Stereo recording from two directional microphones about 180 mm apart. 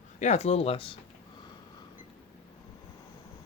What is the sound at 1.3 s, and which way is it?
Snort, 25° left (ahead or behind).